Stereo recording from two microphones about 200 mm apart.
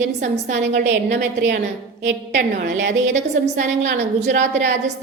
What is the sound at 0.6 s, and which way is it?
Speech, 60° right (ahead or behind).